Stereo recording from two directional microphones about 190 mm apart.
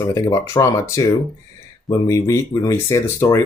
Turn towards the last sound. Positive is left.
turn(degrees=15)  # may be behind; listen again after turning